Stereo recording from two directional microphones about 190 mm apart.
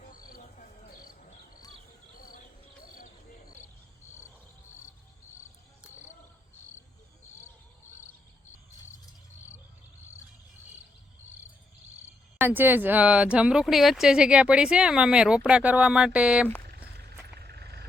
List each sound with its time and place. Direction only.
0.1 s cricket: 50° left (ahead or behind)
12.4 s speech: 10° right (ahead or behind)
17.0 s a sound: 55° right (ahead or behind)